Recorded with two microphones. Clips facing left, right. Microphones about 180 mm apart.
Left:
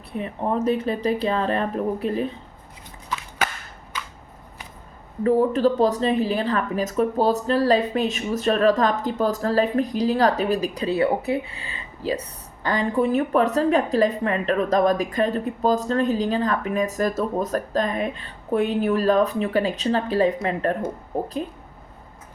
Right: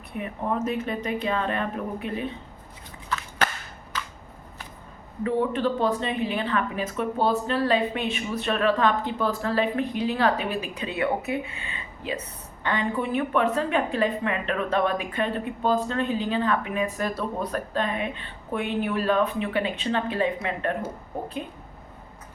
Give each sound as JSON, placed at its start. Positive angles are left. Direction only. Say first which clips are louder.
{"t": 0.2, "sound": "speech", "louder": "left 3 dB", "side_deg": 35}
{"t": 5.2, "sound": "speech", "louder": "left 6 dB", "side_deg": 40}